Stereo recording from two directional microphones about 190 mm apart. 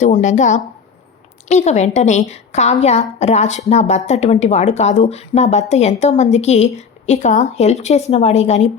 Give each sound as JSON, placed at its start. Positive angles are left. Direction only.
{"t": 0.0, "sound": "a woman's voice", "side_deg": 40}